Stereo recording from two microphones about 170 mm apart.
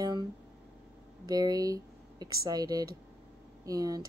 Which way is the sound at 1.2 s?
20° right (ahead or behind).